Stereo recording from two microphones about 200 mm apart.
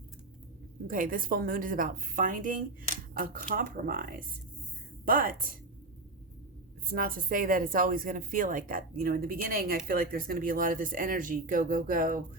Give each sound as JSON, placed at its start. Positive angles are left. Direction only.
{"t": 0.9, "sound": "speech", "side_deg": -45}
{"t": 6.9, "sound": "speech", "side_deg": -45}